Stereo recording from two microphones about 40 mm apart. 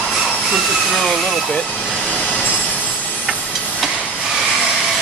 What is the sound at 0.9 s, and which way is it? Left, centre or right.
Speech, centre.